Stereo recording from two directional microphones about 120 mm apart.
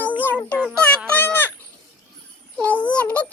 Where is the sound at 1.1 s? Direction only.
15° left (ahead or behind).